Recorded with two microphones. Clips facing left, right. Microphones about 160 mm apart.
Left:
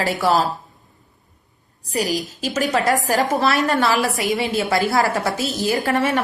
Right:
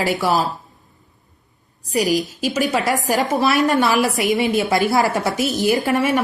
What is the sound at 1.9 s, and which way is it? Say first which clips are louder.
A woman's voice: right 4 dB; 10° right (ahead or behind).